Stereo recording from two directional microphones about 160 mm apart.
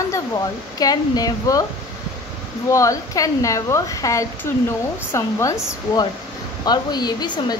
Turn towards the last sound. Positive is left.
turn(degrees=25)  # may be behind; listen again after turning